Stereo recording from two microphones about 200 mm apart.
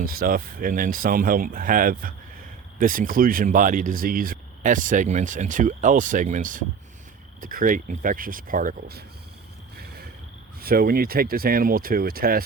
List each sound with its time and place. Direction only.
0.0 s speech: 45° right (ahead or behind)
9.7 s cricket: 50° right (ahead or behind)
10.6 s speech: 50° right (ahead or behind)